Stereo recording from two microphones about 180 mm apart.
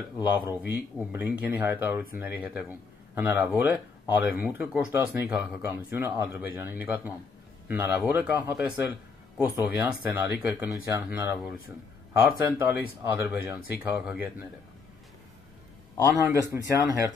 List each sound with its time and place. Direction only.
0.5 s speech: 10° right (ahead or behind)
16.1 s speech: 20° right (ahead or behind)